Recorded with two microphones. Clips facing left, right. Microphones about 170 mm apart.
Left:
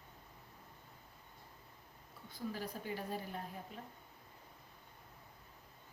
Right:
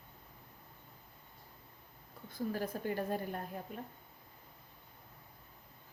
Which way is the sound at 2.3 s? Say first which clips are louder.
Right 6 dB; 50° right (ahead or behind).